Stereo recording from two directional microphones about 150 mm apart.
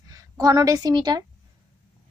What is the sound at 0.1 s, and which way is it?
A woman's voice, 25° right (ahead or behind).